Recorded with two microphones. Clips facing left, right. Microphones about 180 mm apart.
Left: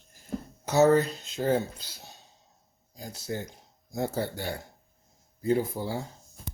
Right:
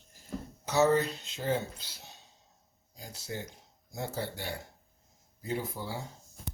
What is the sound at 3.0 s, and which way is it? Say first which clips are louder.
Speech: left 5 dB; 45° left (ahead or behind).